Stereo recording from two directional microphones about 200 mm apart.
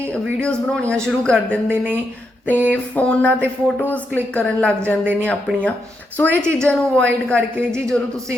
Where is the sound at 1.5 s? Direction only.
10° right (ahead or behind).